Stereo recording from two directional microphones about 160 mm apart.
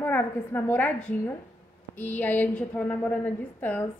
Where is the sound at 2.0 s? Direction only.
10° left (ahead or behind).